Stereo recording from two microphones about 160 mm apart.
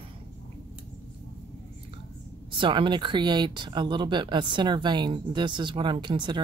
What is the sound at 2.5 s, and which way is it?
Speech, 30° right (ahead or behind).